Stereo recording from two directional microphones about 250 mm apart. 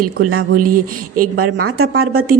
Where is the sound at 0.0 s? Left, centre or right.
Right.